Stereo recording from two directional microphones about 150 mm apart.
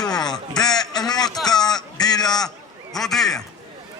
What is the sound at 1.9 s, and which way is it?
Speech, 25° left (ahead or behind).